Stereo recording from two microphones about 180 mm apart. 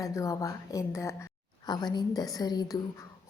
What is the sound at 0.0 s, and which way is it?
A woman's voice, 20° left (ahead or behind).